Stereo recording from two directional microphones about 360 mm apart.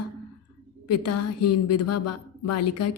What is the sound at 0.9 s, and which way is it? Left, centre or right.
A woman's voice, left.